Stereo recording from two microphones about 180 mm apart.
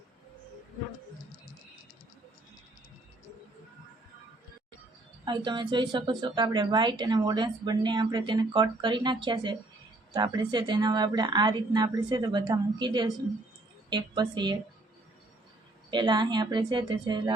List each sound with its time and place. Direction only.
5.2 s speech: 25° right (ahead or behind)
15.9 s speech: 25° right (ahead or behind)